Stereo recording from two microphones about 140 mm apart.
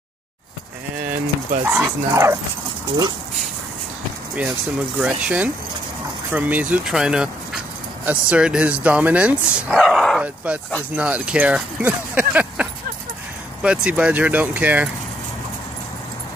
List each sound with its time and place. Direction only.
1.6 s speech: 15° right (ahead or behind)
4.4 s speech: 10° right (ahead or behind)
9.8 s speech: centre (ahead or behind)